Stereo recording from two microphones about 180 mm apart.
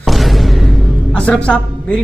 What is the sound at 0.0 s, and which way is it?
Music, centre (ahead or behind).